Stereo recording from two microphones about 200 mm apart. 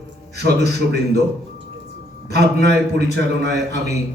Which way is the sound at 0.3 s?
55° right (ahead or behind).